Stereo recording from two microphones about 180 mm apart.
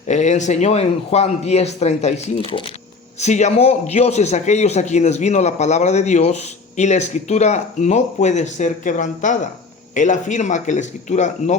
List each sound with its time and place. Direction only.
0.1 s a man's voice: 40° left (ahead or behind)